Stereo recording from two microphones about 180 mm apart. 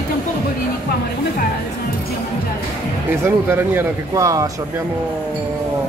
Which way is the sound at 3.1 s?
15° right (ahead or behind).